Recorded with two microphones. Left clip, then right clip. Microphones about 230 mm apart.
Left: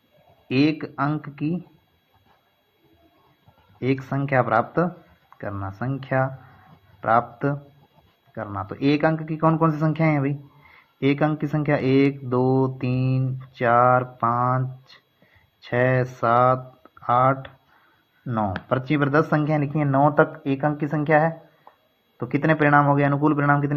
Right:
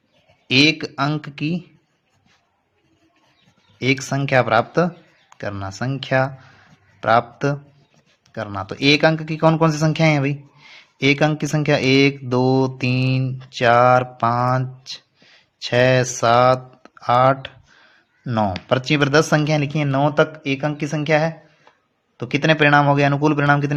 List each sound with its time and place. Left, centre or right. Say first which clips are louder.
0.4 s speech: right 7 dB; right
3.8 s speech: right 5 dB; right